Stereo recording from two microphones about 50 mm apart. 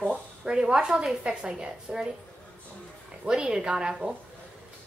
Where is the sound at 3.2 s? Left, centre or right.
Centre.